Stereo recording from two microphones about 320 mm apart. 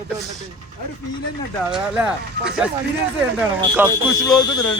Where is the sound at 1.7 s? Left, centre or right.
Centre.